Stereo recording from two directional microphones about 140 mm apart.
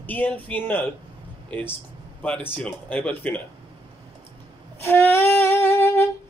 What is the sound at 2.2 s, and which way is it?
Speech, 15° left (ahead or behind).